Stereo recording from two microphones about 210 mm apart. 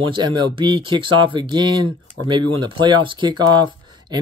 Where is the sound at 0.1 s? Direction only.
20° right (ahead or behind).